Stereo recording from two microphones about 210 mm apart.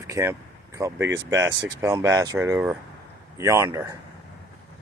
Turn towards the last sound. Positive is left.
turn(degrees=-15)  # may be behind; listen again after turning